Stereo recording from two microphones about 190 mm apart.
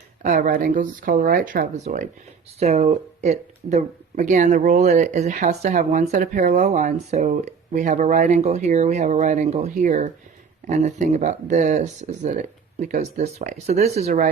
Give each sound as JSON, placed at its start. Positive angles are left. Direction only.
{"t": 0.2, "sound": "speech", "side_deg": -45}